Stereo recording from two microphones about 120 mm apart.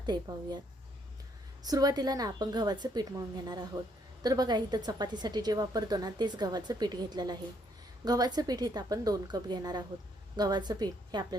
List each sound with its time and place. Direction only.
0.0 s a woman's voice: 35° right (ahead or behind)
1.6 s a woman's voice: 30° right (ahead or behind)